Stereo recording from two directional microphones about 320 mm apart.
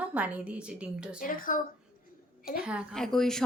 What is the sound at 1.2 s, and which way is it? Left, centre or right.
Speech, left.